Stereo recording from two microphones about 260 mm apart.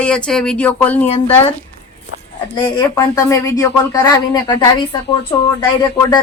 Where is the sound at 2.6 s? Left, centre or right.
Centre.